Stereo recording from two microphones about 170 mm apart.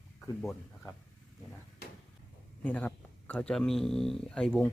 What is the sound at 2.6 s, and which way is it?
Speech, 10° left (ahead or behind).